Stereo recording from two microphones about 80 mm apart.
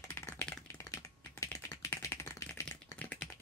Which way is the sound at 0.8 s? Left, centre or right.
Left.